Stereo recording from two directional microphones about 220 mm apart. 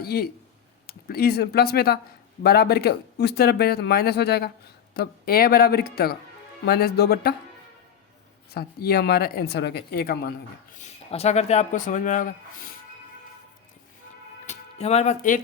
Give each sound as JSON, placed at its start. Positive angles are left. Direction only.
{"t": 0.0, "sound": "speech", "side_deg": 45}
{"t": 8.5, "sound": "speech", "side_deg": 45}
{"t": 10.8, "sound": "speech", "side_deg": 30}
{"t": 14.4, "sound": "music", "side_deg": 30}